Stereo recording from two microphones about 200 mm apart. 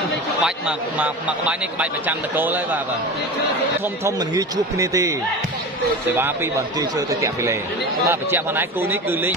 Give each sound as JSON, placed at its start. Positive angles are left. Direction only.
{"t": 0.4, "sound": "speech", "side_deg": -5}
{"t": 4.0, "sound": "speech", "side_deg": -15}
{"t": 6.1, "sound": "speech", "side_deg": -10}